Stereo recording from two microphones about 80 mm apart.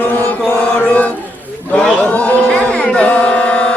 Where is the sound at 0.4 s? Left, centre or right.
Centre.